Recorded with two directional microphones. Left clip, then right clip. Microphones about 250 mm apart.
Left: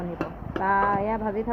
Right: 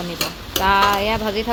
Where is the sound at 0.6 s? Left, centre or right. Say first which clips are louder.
Right 7 dB; right.